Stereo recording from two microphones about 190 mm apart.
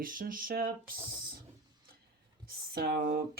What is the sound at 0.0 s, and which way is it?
Speech, 45° right (ahead or behind).